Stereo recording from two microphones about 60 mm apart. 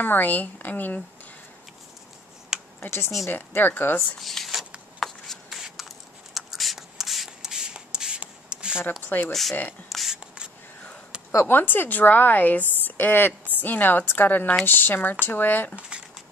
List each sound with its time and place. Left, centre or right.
0.0 s a woman's voice: left
2.8 s a woman's voice: left
4.2 s speech: centre
5.0 s a sound: centre
5.6 s writing: centre
9.0 s a woman's voice: left
9.3 s speech: centre
9.8 s a sound: centre
11.4 s a woman's voice: left
15.9 s a sound: centre